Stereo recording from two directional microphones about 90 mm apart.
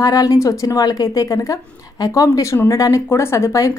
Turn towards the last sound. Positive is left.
turn(degrees=35)  # may be behind; listen again after turning